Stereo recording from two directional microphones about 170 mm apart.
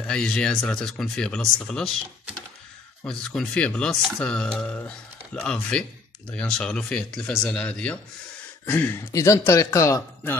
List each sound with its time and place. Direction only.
0.0 s speech: 5° left (ahead or behind)
3.0 s speech: 5° left (ahead or behind)